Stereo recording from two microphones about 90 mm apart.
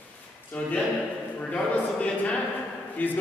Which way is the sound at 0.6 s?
10° left (ahead or behind).